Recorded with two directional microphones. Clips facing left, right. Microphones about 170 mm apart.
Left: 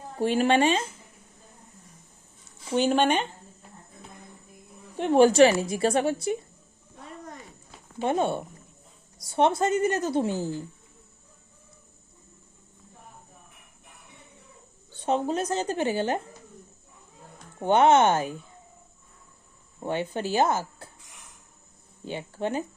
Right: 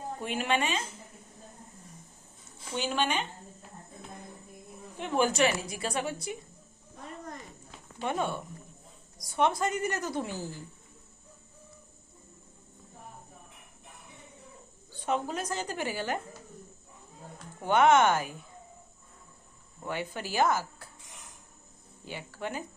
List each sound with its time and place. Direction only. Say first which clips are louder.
0.2 s speech: left 9 dB; 35° left (ahead or behind)
2.7 s speech: left 8 dB; 50° left (ahead or behind)
4.9 s speech: left 10 dB; 35° left (ahead or behind)
8.1 s speech: left 6 dB; 30° left (ahead or behind)
15.0 s speech: left 6 dB; 30° left (ahead or behind)
17.6 s speech: left 3 dB; 25° left (ahead or behind)
19.8 s speech: left 7 dB; 25° left (ahead or behind)
22.0 s speech: left 7 dB; 25° left (ahead or behind)